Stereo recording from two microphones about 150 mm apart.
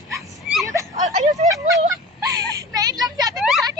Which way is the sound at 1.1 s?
50° right (ahead or behind).